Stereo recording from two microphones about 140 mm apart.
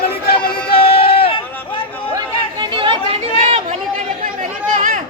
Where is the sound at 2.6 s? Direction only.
35° right (ahead or behind).